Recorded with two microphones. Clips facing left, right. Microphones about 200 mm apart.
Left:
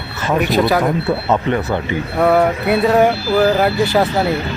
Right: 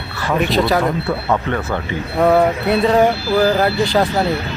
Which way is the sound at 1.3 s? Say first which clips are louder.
Left 2 dB; 20° left (ahead or behind).